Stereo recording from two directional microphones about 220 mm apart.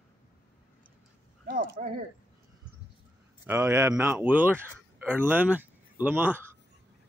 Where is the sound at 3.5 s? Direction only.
10° right (ahead or behind).